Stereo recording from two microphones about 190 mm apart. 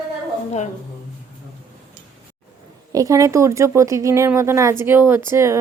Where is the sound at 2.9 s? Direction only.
15° right (ahead or behind).